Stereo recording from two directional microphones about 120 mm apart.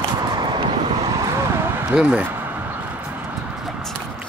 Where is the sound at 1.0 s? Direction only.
30° right (ahead or behind).